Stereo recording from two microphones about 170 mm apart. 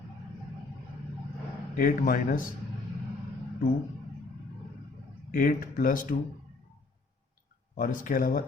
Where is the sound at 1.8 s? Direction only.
55° left (ahead or behind).